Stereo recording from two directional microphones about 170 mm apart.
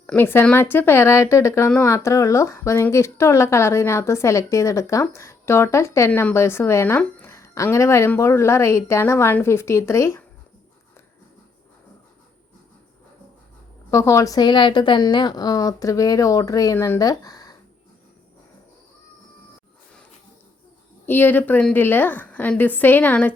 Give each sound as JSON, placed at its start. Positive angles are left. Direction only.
{"t": 0.0, "sound": "speech", "side_deg": 10}
{"t": 13.9, "sound": "a woman's voice", "side_deg": 15}
{"t": 21.1, "sound": "speech", "side_deg": 10}